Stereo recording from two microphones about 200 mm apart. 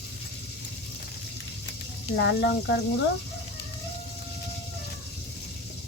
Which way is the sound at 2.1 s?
65° left (ahead or behind).